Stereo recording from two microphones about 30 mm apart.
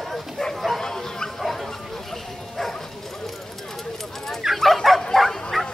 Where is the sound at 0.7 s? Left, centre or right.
Centre.